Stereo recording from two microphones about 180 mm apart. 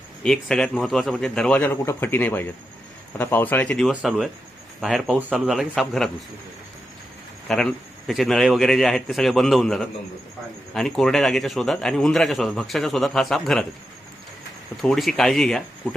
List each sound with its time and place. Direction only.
0.2 s a man's voice: 5° left (ahead or behind)
7.4 s a man's voice: centre (ahead or behind)
14.8 s a man's voice: centre (ahead or behind)